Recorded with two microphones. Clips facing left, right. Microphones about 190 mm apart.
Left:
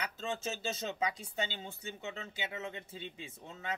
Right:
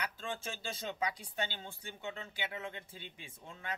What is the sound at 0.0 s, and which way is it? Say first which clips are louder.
Speech: left 3 dB; 25° left (ahead or behind).